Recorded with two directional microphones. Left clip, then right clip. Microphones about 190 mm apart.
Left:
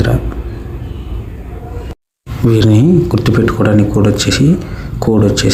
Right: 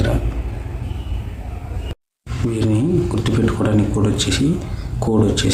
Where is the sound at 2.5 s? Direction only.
30° left (ahead or behind).